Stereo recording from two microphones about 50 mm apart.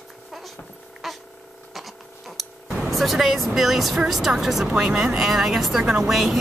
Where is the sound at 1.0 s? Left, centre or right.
Centre.